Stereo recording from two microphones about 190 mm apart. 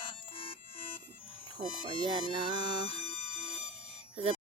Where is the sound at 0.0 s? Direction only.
30° left (ahead or behind).